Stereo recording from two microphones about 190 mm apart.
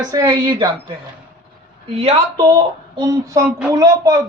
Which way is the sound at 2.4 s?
20° right (ahead or behind).